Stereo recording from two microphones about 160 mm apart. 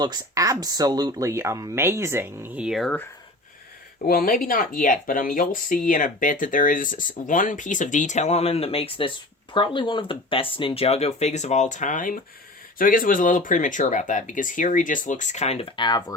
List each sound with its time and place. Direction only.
0.0 s speech: 25° right (ahead or behind); by 2.9 s centre (ahead or behind)
4.0 s speech: 65° left (ahead or behind); by 16.1 s 25° left (ahead or behind)